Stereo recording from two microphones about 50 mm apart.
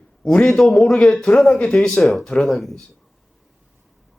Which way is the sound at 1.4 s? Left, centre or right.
Left.